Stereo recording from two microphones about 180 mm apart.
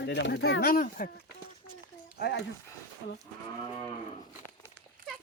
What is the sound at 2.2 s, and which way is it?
Speech, 65° left (ahead or behind).